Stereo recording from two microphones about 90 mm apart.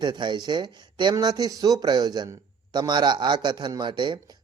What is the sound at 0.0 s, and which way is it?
A man's voice, 55° right (ahead or behind).